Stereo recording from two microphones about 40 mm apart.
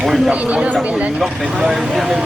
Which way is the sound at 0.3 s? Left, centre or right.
Right.